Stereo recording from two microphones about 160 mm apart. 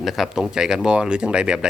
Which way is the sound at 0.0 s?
Centre (ahead or behind).